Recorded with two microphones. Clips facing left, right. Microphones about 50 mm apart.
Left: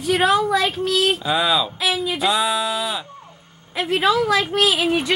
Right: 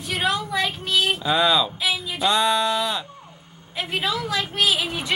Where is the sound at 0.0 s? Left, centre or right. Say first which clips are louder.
Left 7 dB; left.